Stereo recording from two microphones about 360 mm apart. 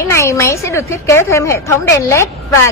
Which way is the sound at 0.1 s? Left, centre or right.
Centre.